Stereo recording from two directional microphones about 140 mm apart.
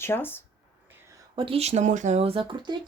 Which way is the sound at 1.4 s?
45° right (ahead or behind).